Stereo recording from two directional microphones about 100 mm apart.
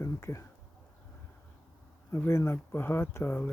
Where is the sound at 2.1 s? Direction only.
25° left (ahead or behind).